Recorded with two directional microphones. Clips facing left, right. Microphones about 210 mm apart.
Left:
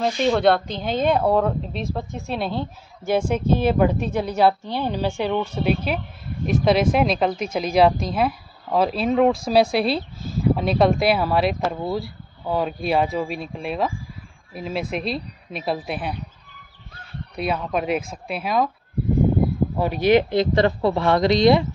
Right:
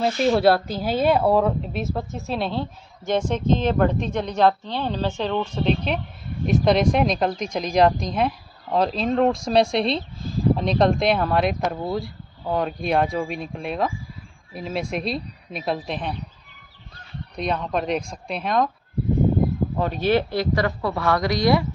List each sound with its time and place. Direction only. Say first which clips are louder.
0.0 s speech: even; 5° right (ahead or behind)
17.4 s speech: left 1 dB; 5° left (ahead or behind)
19.8 s speech: left 4 dB; 10° left (ahead or behind)